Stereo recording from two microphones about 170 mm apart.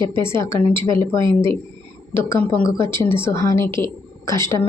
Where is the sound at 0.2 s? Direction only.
15° left (ahead or behind).